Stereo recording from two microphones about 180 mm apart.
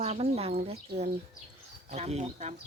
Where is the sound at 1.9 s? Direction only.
40° right (ahead or behind).